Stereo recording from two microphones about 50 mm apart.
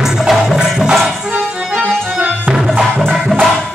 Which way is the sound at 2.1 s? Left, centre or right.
Right.